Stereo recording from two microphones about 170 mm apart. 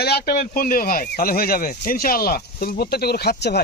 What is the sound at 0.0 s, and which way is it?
Speech, 70° left (ahead or behind).